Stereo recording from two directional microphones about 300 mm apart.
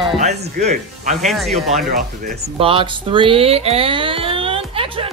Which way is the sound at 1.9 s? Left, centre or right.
Right.